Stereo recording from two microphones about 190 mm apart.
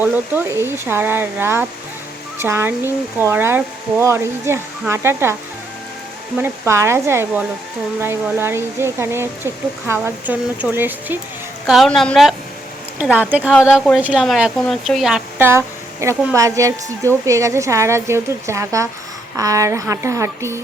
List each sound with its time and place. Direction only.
0.0 s speech: 10° right (ahead or behind)
6.4 s speech: 15° right (ahead or behind)
11.6 s a woman's voice: centre (ahead or behind)